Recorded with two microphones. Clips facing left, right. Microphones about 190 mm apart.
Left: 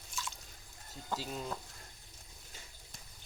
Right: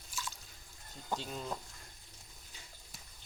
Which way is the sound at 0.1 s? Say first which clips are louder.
Even; 5° right (ahead or behind).